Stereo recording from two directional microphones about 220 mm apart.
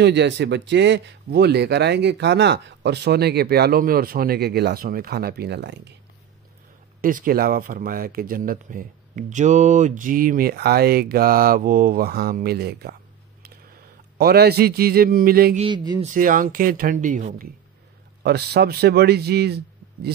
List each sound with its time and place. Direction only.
0.0 s speech: 50° right (ahead or behind)
7.0 s speech: 40° right (ahead or behind)
14.1 s speech: 45° right (ahead or behind)
15.6 s speech: 20° right (ahead or behind)
16.0 s speech: 35° right (ahead or behind)
18.2 s a man's voice: 45° right (ahead or behind)